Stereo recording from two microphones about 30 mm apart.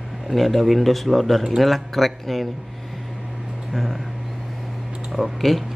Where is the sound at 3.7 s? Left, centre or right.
Centre.